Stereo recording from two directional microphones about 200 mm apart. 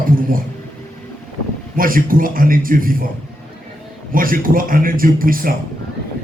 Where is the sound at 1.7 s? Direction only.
45° right (ahead or behind).